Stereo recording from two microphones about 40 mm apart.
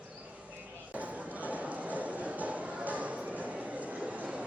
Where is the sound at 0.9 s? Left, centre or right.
Right.